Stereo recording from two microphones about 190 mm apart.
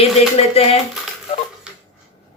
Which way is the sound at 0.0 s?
30° left (ahead or behind).